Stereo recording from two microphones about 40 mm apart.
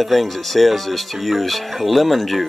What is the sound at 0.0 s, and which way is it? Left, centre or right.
Speech, centre.